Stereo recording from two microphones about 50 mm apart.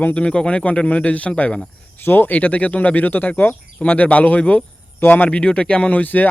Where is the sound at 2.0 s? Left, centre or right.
Left.